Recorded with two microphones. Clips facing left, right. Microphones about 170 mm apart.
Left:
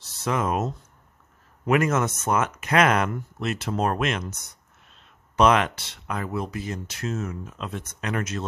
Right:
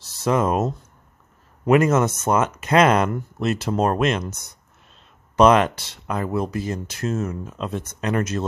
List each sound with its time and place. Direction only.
0.2 s speech: 35° right (ahead or behind)
1.7 s speech: 30° right (ahead or behind)
5.3 s speech: 40° right (ahead or behind)